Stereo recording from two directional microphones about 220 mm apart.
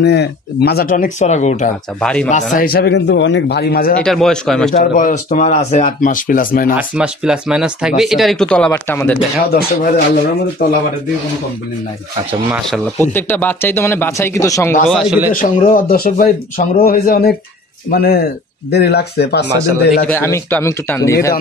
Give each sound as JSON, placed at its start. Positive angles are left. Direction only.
{"t": 0.0, "sound": "speech", "side_deg": 50}
{"t": 2.0, "sound": "speech", "side_deg": 5}
{"t": 2.5, "sound": "speech", "side_deg": 40}
{"t": 4.0, "sound": "speech", "side_deg": 0}
{"t": 4.9, "sound": "speech", "side_deg": 35}
{"t": 6.8, "sound": "speech", "side_deg": -5}
{"t": 9.5, "sound": "speech", "side_deg": 45}
{"t": 12.4, "sound": "speech", "side_deg": -5}
{"t": 13.1, "sound": "speech", "side_deg": 10}
{"t": 14.9, "sound": "speech", "side_deg": 0}
{"t": 15.3, "sound": "speech", "side_deg": 40}
{"t": 20.1, "sound": "speech", "side_deg": 10}